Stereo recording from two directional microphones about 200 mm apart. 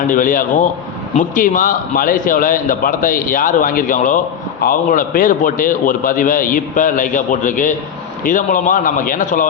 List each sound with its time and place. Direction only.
0.1 s a man's voice: 40° left (ahead or behind)